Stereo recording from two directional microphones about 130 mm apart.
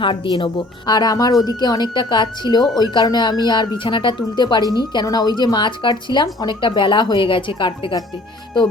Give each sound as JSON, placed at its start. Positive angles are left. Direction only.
{"t": 0.3, "sound": "speech", "side_deg": 35}